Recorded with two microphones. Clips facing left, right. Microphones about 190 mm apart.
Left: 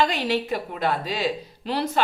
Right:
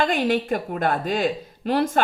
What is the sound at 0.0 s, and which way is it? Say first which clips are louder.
Speech: right 2 dB; 50° right (ahead or behind).